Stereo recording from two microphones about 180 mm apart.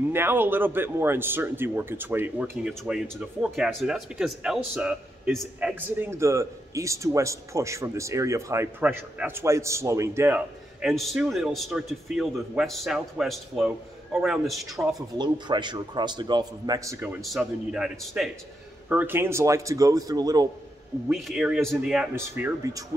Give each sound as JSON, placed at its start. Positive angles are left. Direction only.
{"t": 0.1, "sound": "speech", "side_deg": -10}
{"t": 2.4, "sound": "speech", "side_deg": 0}
{"t": 15.1, "sound": "a man's voice", "side_deg": -25}
{"t": 17.2, "sound": "a man's voice", "side_deg": 0}
{"t": 21.1, "sound": "a man's voice", "side_deg": 0}
{"t": 22.1, "sound": "speech", "side_deg": -15}